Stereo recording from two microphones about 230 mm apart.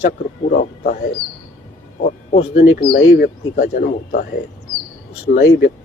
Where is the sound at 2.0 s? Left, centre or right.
Left.